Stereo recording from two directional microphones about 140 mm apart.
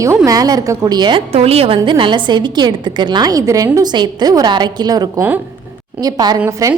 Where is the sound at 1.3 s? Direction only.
45° right (ahead or behind).